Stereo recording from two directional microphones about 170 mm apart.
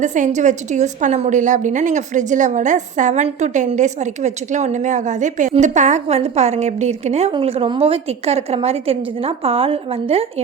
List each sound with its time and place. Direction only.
0.0 s a woman's voice: 45° right (ahead or behind)